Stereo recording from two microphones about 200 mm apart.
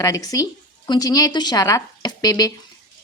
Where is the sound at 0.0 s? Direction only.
20° left (ahead or behind).